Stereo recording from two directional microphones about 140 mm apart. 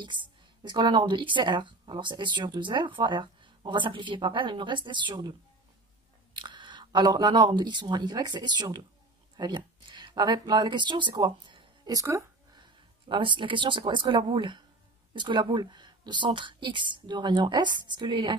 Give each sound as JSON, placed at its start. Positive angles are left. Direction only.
{"t": 0.7, "sound": "speech", "side_deg": -30}
{"t": 6.4, "sound": "speech", "side_deg": -35}
{"t": 13.1, "sound": "speech", "side_deg": -35}